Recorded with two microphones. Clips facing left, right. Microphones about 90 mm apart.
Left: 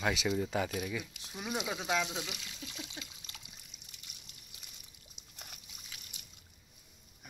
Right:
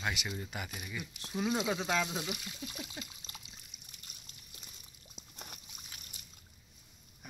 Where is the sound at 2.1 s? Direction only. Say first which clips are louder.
Right 3 dB; 25° right (ahead or behind).